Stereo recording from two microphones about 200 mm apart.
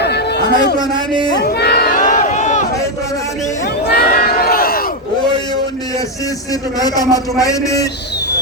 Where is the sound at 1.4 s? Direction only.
50° left (ahead or behind); by 2.6 s 35° left (ahead or behind).